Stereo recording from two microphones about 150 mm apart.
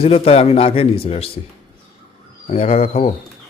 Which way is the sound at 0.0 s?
40° left (ahead or behind).